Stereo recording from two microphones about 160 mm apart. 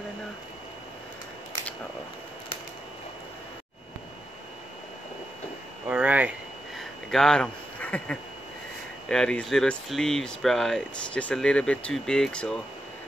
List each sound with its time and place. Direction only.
5.9 s speech: 10° right (ahead or behind)
6.8 s a sound: 5° left (ahead or behind)
9.1 s speech: 5° left (ahead or behind)